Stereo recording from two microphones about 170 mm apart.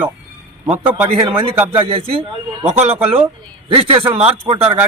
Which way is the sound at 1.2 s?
30° right (ahead or behind).